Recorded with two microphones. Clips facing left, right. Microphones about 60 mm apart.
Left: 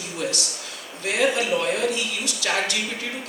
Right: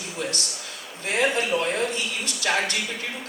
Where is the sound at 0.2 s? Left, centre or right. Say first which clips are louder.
Left 2 dB; right.